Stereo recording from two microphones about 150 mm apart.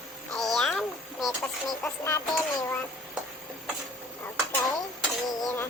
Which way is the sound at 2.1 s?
25° left (ahead or behind).